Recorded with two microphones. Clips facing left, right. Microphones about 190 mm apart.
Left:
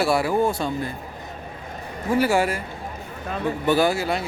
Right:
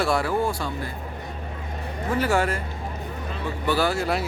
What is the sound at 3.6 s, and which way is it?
Speech, 15° left (ahead or behind).